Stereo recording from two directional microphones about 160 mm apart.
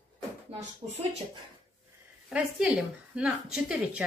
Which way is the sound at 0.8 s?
35° right (ahead or behind).